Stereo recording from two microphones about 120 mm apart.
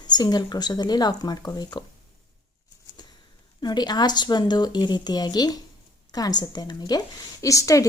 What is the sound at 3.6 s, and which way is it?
A woman's voice, 35° left (ahead or behind).